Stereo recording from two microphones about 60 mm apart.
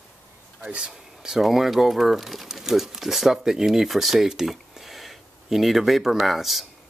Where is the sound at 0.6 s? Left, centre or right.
Centre.